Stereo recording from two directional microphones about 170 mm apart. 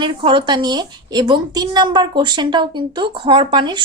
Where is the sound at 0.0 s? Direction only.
30° right (ahead or behind).